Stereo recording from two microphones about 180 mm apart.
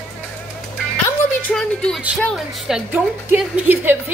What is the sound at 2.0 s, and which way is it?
A woman's voice, 5° right (ahead or behind).